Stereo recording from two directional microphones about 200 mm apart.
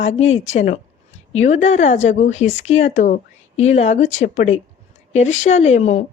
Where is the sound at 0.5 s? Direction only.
40° left (ahead or behind).